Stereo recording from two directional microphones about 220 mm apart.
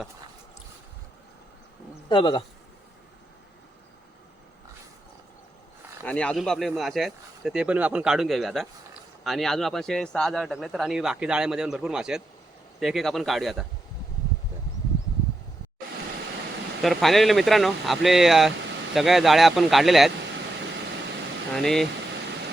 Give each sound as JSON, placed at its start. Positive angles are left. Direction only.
{"t": 2.0, "sound": "speech", "side_deg": 20}
{"t": 6.1, "sound": "speech", "side_deg": 5}
{"t": 16.8, "sound": "speech", "side_deg": 0}
{"t": 21.5, "sound": "speech", "side_deg": 0}